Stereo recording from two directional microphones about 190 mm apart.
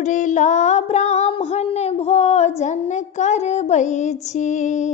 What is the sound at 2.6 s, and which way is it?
Child singing, 40° left (ahead or behind).